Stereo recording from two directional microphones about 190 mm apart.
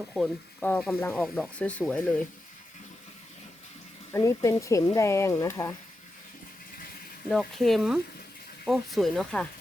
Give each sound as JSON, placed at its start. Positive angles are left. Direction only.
{"t": 0.6, "sound": "speech", "side_deg": 5}
{"t": 4.1, "sound": "speech", "side_deg": 15}
{"t": 7.3, "sound": "speech", "side_deg": 0}